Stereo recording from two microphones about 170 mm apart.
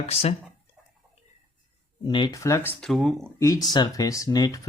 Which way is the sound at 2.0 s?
30° left (ahead or behind).